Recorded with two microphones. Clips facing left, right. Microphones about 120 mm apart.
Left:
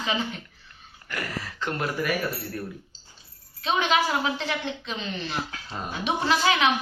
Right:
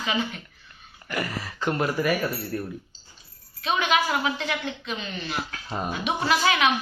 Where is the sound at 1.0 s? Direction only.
10° right (ahead or behind).